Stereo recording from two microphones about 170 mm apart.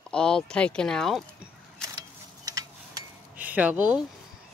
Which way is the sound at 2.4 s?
20° right (ahead or behind).